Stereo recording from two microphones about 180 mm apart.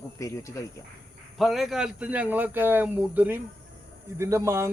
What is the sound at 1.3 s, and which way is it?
Speech, centre (ahead or behind).